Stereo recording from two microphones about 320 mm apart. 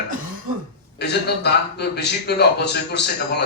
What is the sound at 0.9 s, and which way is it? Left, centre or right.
A man's voice, left.